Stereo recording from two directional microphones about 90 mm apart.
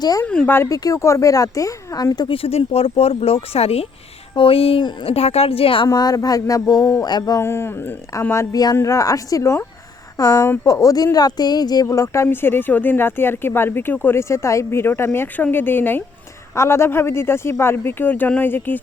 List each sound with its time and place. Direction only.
0.4 s speech: 25° left (ahead or behind)
0.7 s speech: 40° left (ahead or behind)
2.2 s speech: 90° left
5.9 s speech: 45° left (ahead or behind)
7.4 s speech: 25° left (ahead or behind)
10.2 s speech: 45° left (ahead or behind)
10.4 s speech: 25° left (ahead or behind)
10.7 s speech: 40° left (ahead or behind)
11.9 s speech: 35° left (ahead or behind)